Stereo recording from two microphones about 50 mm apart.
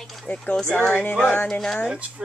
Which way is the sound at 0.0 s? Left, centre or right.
Centre.